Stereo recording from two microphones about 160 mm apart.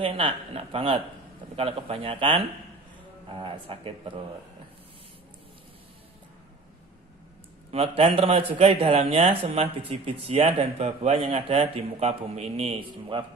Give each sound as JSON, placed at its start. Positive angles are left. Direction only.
{"t": 0.0, "sound": "a man's voice", "side_deg": -35}
{"t": 7.7, "sound": "a man's voice", "side_deg": -35}